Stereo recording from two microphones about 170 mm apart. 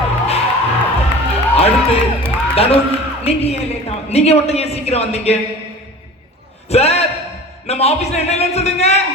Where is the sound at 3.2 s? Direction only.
35° left (ahead or behind).